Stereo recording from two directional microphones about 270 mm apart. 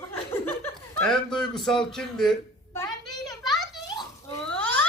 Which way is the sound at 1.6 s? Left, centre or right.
Centre.